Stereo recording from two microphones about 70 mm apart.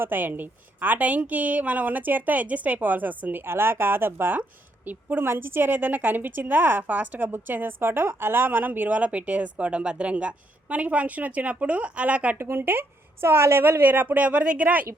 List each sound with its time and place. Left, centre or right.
0.0 s a woman's voice: right
12.4 s a woman's voice: right